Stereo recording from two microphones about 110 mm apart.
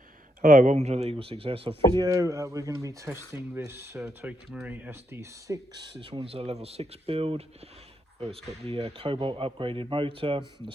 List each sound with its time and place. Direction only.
0.7 s speech: 80° right; by 1.7 s 60° right (ahead or behind)
2.0 s speech: 30° right (ahead or behind)
4.3 s speech: 15° right (ahead or behind)
5.7 s speech: 45° right (ahead or behind)
6.2 s speech: 65° right (ahead or behind)